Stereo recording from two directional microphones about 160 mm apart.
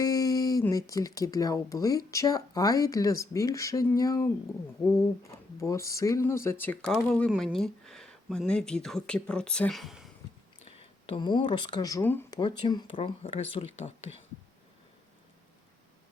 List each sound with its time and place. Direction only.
0.0 s a sound: 20° left (ahead or behind)
0.7 s speech: 20° left (ahead or behind)
6.9 s speech: centre (ahead or behind)
10.7 s speech: 35° left (ahead or behind); by 12.2 s 15° left (ahead or behind)
12.3 s speech: 30° left (ahead or behind)